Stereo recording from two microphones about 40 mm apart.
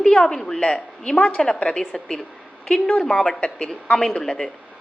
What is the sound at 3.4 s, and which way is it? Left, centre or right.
Speech, left.